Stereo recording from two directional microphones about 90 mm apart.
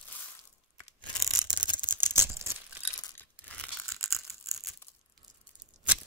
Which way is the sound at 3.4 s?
15° left (ahead or behind).